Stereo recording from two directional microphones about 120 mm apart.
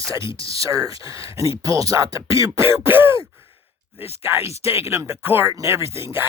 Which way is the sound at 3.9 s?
60° left (ahead or behind).